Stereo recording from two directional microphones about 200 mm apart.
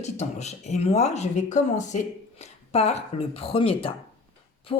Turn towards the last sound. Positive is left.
turn(degrees=25)  # may be behind; listen again after turning